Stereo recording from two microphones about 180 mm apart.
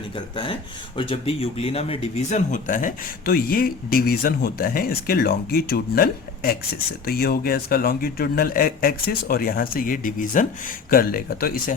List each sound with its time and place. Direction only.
0.9 s speech: 30° left (ahead or behind); by 11.7 s 55° left (ahead or behind)